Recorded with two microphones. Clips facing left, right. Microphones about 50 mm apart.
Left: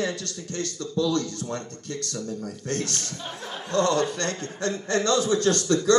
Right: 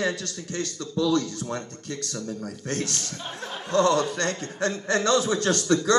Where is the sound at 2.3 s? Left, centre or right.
Right.